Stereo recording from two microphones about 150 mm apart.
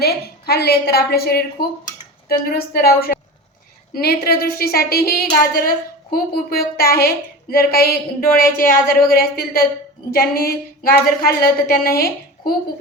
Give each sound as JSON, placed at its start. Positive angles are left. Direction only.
{"t": 0.0, "sound": "a woman's voice", "side_deg": 90}
{"t": 2.2, "sound": "a woman's voice", "side_deg": 80}
{"t": 8.4, "sound": "a woman's voice", "side_deg": 75}